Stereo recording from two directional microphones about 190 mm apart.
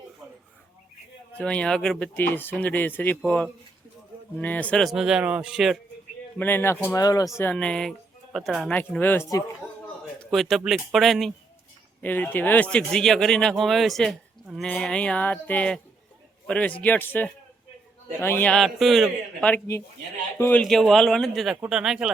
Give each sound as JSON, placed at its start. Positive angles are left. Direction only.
{"t": 1.4, "sound": "a man's voice", "side_deg": 5}
{"t": 6.4, "sound": "speech", "side_deg": 10}
{"t": 7.5, "sound": "a man's voice", "side_deg": 5}
{"t": 10.3, "sound": "a man's voice", "side_deg": 0}